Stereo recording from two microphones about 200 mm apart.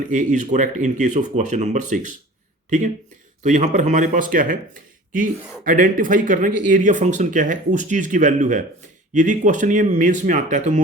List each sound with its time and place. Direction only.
0.1 s speech: 40° right (ahead or behind)